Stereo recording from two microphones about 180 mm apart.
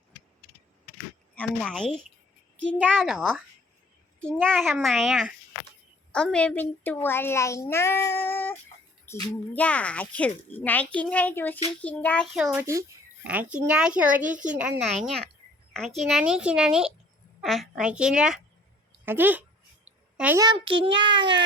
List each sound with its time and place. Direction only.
1.4 s a child's voice: 5° left (ahead or behind)
14.3 s a woman's voice: 45° right (ahead or behind)
14.5 s a child's voice: 5° right (ahead or behind)
20.4 s a child's voice: 25° right (ahead or behind)